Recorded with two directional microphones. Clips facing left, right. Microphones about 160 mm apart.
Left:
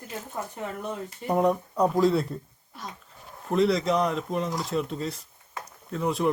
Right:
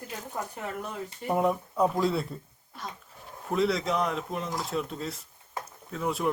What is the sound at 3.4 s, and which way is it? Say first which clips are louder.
Speech: left 4 dB; centre (ahead or behind).